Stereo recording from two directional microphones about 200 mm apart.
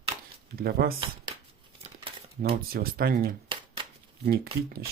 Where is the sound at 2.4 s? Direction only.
45° right (ahead or behind).